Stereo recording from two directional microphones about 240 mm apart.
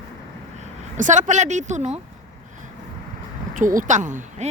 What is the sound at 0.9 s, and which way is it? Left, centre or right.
Speech, right.